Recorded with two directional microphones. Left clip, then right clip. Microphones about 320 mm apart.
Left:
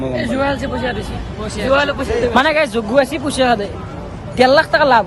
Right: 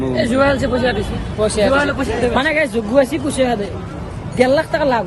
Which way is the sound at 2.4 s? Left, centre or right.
Centre.